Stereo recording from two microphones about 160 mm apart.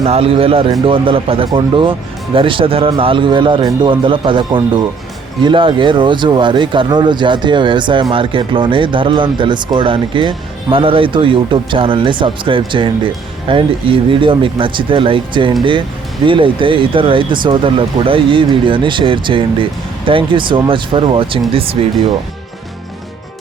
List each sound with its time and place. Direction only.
0.0 s speech: 40° right (ahead or behind)